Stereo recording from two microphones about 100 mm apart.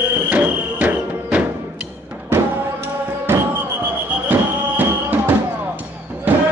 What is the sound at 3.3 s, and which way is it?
Basketball bounce, 25° right (ahead or behind).